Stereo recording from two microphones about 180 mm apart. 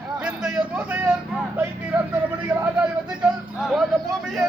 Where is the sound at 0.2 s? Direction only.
5° right (ahead or behind).